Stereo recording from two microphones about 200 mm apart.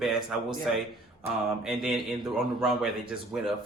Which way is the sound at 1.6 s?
Centre (ahead or behind).